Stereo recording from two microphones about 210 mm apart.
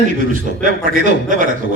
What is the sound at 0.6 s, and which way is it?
Speech, 40° right (ahead or behind).